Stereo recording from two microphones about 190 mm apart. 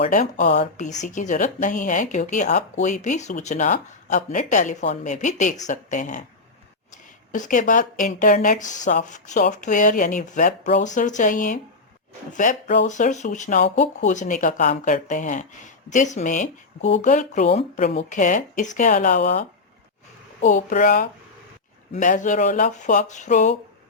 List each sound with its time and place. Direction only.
0.0 s speech: 40° left (ahead or behind)
7.3 s speech: 40° left (ahead or behind)